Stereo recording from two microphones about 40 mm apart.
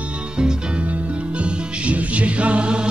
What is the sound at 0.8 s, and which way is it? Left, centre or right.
Music, right.